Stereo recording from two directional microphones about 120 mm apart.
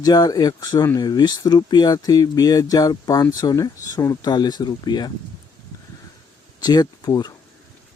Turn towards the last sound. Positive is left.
turn(degrees=30)  # may be behind; listen again after turning